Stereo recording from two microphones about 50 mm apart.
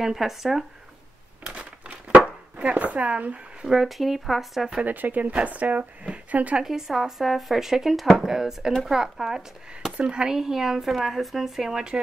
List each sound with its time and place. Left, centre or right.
0.0 s speech: centre
1.4 s crumpling: right
2.6 s speech: right
3.6 s speech: centre
4.8 s speech: right
6.6 s speech: centre